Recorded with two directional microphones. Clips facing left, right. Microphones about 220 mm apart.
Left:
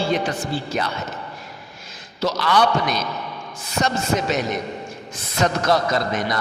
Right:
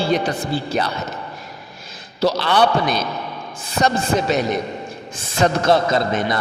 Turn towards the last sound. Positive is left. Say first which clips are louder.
# right 3 dB
turn(degrees=-25)  # may be behind; listen again after turning